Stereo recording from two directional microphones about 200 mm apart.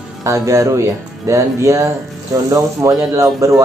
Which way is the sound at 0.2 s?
15° right (ahead or behind).